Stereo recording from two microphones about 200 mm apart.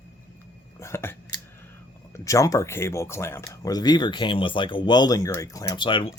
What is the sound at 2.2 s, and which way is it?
Speech, 15° left (ahead or behind).